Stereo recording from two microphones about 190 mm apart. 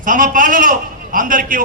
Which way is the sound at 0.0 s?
45° right (ahead or behind).